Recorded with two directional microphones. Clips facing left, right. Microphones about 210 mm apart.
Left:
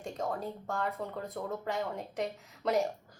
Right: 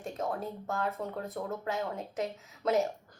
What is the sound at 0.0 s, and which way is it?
Speech, centre (ahead or behind).